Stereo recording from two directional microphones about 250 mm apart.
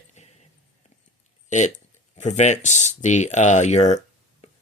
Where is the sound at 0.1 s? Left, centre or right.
Left.